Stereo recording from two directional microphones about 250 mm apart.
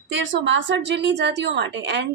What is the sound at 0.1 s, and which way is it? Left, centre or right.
A woman's voice, right.